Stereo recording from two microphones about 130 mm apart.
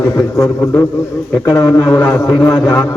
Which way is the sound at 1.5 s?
20° left (ahead or behind).